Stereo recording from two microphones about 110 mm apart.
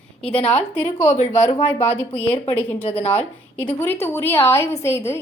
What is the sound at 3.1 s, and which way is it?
A woman's voice, 15° left (ahead or behind).